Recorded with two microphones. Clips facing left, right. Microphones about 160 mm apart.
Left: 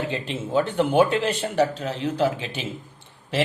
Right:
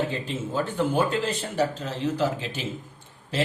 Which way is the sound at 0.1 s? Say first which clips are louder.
Left 4 dB; 70° left (ahead or behind).